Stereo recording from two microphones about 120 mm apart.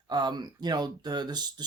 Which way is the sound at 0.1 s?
35° right (ahead or behind).